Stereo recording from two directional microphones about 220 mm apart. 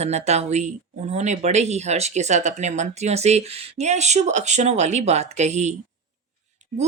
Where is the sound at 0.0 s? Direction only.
30° right (ahead or behind).